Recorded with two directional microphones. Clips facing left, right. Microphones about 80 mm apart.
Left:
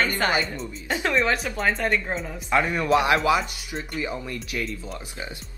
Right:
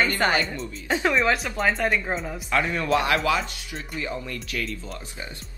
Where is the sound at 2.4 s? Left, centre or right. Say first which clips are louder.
Left 2 dB; centre.